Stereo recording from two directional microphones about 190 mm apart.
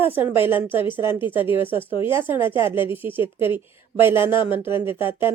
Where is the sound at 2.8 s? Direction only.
10° right (ahead or behind).